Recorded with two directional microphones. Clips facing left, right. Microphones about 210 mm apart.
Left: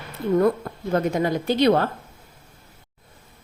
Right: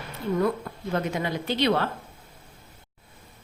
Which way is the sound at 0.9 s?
40° left (ahead or behind).